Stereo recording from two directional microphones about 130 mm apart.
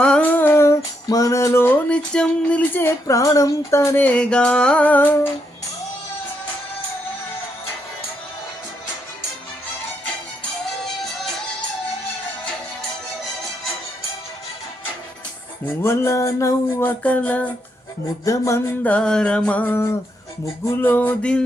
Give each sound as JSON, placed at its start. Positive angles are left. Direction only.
{"t": 0.0, "sound": "music", "side_deg": 10}
{"t": 1.9, "sound": "music", "side_deg": 5}
{"t": 3.1, "sound": "music", "side_deg": 25}
{"t": 15.8, "sound": "music", "side_deg": 20}
{"t": 17.0, "sound": "music", "side_deg": 10}
{"t": 18.3, "sound": "music", "side_deg": 20}